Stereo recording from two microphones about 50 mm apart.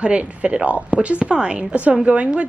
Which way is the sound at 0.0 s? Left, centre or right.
Right.